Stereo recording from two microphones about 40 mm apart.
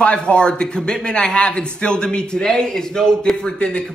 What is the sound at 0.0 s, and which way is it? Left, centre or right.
A man's voice, left.